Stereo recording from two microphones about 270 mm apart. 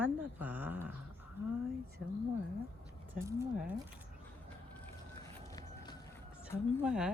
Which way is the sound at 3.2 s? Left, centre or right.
Centre.